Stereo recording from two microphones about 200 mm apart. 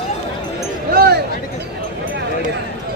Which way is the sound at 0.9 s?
50° right (ahead or behind).